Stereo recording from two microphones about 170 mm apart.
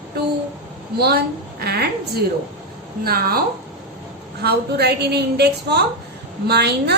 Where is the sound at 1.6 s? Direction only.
70° right (ahead or behind).